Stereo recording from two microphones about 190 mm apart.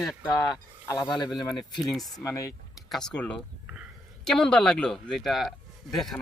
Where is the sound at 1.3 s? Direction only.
Centre (ahead or behind).